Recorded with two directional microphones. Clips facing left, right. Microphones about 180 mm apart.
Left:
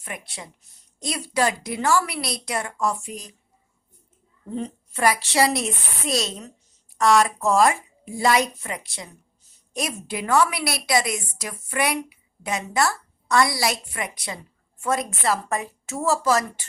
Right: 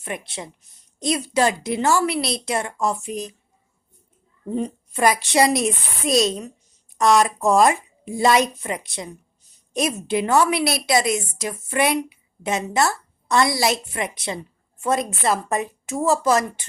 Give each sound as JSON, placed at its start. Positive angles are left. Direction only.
{"t": 0.0, "sound": "speech", "side_deg": -25}
{"t": 4.5, "sound": "a woman's voice", "side_deg": -15}